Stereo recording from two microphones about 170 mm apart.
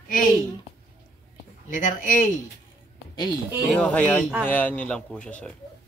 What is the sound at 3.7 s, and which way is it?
Speech, 5° left (ahead or behind).